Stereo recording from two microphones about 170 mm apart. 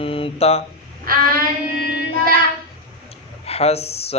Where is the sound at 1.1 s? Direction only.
60° right (ahead or behind).